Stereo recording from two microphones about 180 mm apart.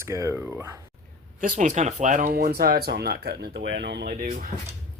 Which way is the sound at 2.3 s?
60° right (ahead or behind).